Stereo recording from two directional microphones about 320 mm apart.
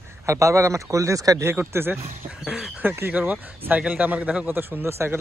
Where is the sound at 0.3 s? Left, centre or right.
Centre.